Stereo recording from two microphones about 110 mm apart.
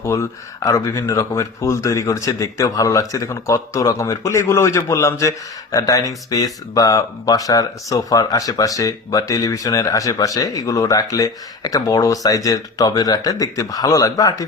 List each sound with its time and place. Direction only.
0.0 s speech: 25° left (ahead or behind)